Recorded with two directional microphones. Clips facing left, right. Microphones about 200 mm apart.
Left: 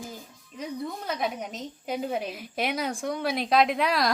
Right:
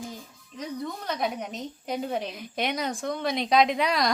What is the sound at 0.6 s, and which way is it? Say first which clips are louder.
A woman's voice: even; 5° left (ahead or behind).